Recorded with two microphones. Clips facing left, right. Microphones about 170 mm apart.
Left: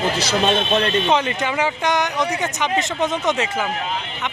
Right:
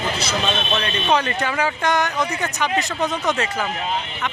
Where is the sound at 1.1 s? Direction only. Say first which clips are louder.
Left 1 dB; 20° left (ahead or behind).